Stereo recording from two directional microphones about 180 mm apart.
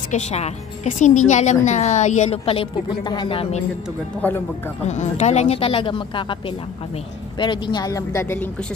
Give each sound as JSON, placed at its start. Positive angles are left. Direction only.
{"t": 0.1, "sound": "a woman's voice", "side_deg": 40}
{"t": 4.8, "sound": "a woman's voice", "side_deg": 40}
{"t": 7.3, "sound": "speech", "side_deg": 25}